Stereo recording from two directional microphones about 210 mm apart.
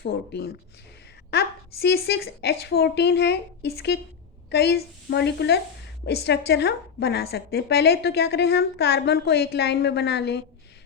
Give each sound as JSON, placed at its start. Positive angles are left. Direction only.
{"t": 0.0, "sound": "a woman's voice", "side_deg": 50}